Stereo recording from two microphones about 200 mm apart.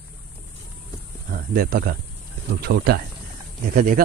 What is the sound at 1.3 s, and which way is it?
Speech, 50° right (ahead or behind).